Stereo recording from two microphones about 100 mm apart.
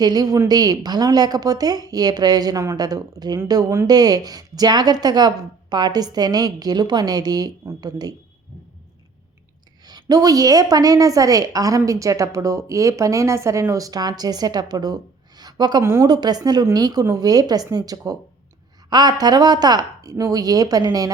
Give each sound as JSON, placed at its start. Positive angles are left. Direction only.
{"t": 0.0, "sound": "a woman's voice", "side_deg": -40}
{"t": 9.8, "sound": "a woman's voice", "side_deg": -40}
{"t": 15.4, "sound": "a sound", "side_deg": -45}
{"t": 15.8, "sound": "speech", "side_deg": -25}
{"t": 16.0, "sound": "a woman's voice", "side_deg": -40}